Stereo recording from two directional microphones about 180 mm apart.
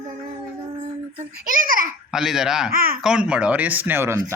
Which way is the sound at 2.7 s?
55° right (ahead or behind).